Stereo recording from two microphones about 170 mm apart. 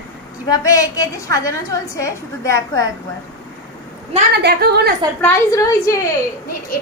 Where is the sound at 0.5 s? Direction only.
20° left (ahead or behind).